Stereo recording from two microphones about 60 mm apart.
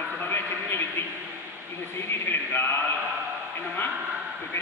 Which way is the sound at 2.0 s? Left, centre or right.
Left.